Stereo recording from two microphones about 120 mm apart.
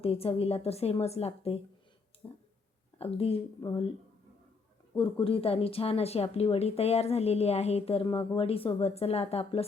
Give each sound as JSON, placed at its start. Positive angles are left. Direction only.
{"t": 0.0, "sound": "speech", "side_deg": 55}
{"t": 2.2, "sound": "a sound", "side_deg": 35}
{"t": 3.0, "sound": "speech", "side_deg": 55}
{"t": 5.2, "sound": "speech", "side_deg": 50}